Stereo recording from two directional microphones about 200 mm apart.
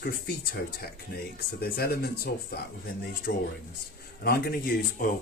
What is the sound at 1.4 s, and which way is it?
Speech, 50° left (ahead or behind).